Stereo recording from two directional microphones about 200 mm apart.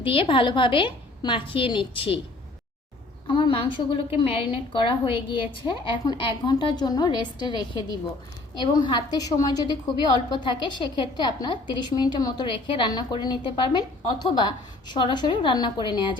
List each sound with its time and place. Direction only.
0.0 s a woman's voice: 25° left (ahead or behind)
3.2 s a woman's voice: 25° left (ahead or behind)